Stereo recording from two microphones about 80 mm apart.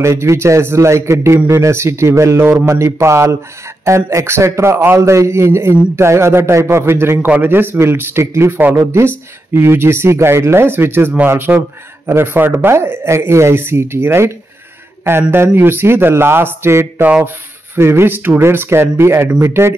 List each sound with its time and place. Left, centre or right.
0.0 s speech: right